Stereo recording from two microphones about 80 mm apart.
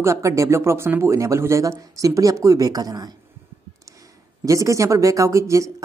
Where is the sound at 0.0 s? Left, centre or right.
Right.